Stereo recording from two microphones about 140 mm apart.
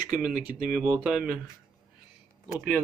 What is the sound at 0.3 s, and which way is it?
Speech, 85° right.